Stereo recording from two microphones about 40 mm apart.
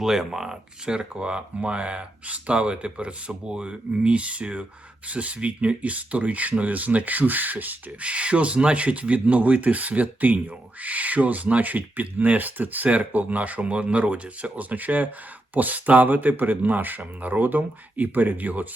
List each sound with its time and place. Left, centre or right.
0.0 s speech: centre; by 7.8 s right
8.0 s speech: right